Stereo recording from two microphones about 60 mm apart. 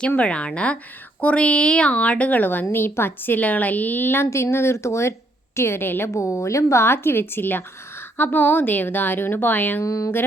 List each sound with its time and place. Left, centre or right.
0.2 s a woman's voice: centre; by 6.1 s left
6.1 s a woman's voice: left
6.8 s a woman's voice: left
9.8 s a woman's voice: left